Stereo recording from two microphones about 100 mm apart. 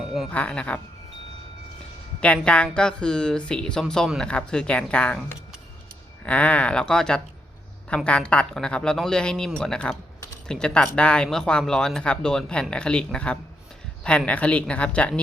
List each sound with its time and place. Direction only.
0.0 s a sound: centre (ahead or behind)
0.3 s speech: 10° left (ahead or behind)
2.2 s speech: 10° left (ahead or behind)
6.2 s speech: 15° left (ahead or behind)